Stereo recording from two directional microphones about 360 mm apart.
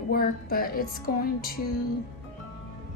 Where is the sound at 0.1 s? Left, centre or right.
Left.